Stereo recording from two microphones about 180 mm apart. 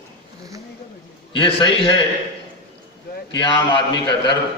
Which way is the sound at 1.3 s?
30° left (ahead or behind).